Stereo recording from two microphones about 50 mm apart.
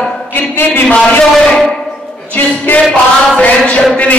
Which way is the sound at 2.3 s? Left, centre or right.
Left.